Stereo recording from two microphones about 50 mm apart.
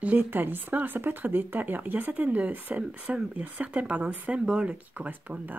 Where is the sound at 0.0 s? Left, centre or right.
Right.